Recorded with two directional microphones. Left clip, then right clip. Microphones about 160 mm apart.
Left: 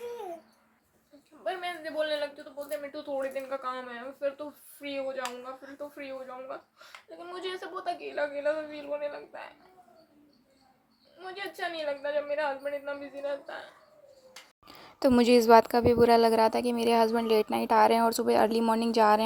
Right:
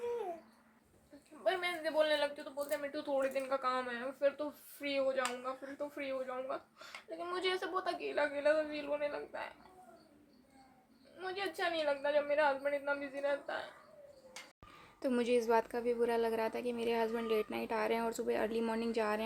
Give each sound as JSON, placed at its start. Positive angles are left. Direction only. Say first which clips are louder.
{"t": 1.5, "sound": "a sound", "louder": "left 1 dB", "side_deg": -15}
{"t": 6.0, "sound": "a woman's voice", "louder": "right 2 dB", "side_deg": -15}
{"t": 11.2, "sound": "a woman's voice", "louder": "left 2 dB", "side_deg": -15}
{"t": 14.9, "sound": "a woman's voice", "louder": "left 11 dB", "side_deg": 50}